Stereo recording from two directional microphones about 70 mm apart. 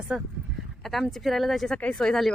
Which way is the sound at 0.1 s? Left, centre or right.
Centre.